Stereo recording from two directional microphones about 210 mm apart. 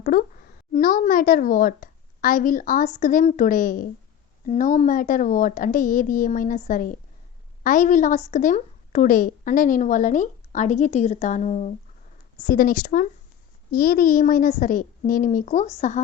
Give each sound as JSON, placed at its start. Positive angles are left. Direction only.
{"t": 0.0, "sound": "a child's voice", "side_deg": 40}
{"t": 12.4, "sound": "a woman's voice", "side_deg": 45}